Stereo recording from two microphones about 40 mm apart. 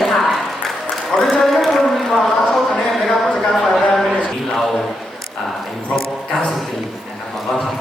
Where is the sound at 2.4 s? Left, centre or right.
Centre.